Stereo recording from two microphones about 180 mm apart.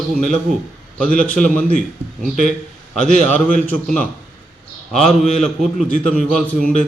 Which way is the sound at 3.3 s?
5° left (ahead or behind).